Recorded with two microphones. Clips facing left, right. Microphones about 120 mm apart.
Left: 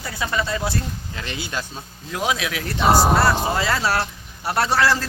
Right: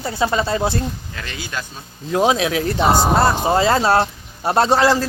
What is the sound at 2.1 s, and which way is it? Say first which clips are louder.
Speech: right 8 dB; 30° right (ahead or behind).